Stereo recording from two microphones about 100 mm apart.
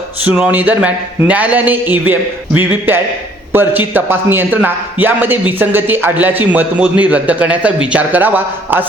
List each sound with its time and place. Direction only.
0.3 s a man's voice: 15° right (ahead or behind)